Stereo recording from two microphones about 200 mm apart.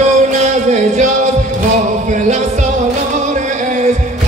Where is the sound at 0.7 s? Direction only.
35° right (ahead or behind).